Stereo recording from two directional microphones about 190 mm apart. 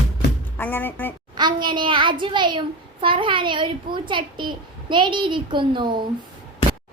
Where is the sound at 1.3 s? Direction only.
25° right (ahead or behind).